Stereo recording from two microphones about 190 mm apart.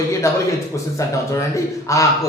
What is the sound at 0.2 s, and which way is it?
A man's voice, 15° left (ahead or behind).